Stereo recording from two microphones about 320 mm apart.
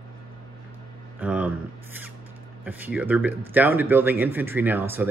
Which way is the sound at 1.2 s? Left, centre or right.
Centre.